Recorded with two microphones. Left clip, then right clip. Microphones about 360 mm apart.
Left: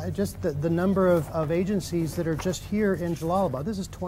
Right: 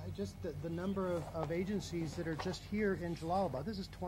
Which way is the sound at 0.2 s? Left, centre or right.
Left.